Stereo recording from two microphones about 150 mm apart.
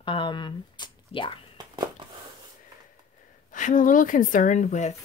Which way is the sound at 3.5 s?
60° left (ahead or behind).